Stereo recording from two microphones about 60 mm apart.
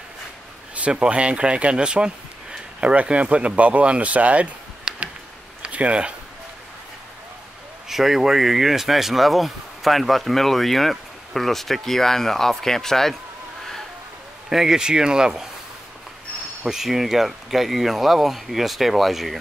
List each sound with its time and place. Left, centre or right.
0.7 s speech: right
7.9 s speech: centre
14.5 s speech: centre
16.6 s speech: centre